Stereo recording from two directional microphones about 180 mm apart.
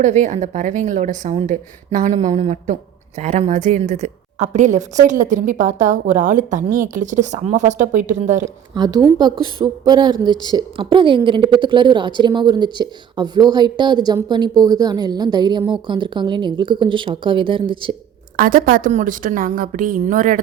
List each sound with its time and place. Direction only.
0.0 s a woman's voice: 40° right (ahead or behind)
8.7 s a woman's voice: 20° right (ahead or behind)
18.3 s a woman's voice: 50° right (ahead or behind)